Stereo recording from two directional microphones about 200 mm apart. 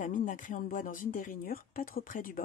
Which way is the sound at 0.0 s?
40° left (ahead or behind).